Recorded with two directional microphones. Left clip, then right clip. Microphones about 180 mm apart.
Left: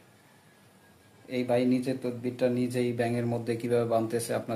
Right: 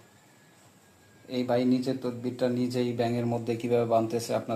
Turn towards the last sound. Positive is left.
turn(degrees=0)  # may be behind; listen again after turning